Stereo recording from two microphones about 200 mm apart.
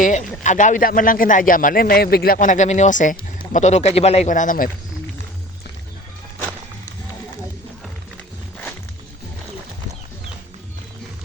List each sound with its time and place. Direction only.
0.0 s a man's voice: 35° left (ahead or behind)